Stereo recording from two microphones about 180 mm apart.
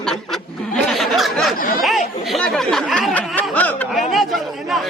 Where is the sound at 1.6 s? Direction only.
50° left (ahead or behind).